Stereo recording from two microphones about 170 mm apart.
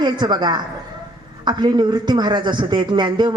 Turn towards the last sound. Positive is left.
turn(degrees=-25)  # may be behind; listen again after turning